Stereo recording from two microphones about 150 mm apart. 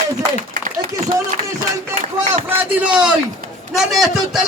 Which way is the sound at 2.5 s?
10° right (ahead or behind).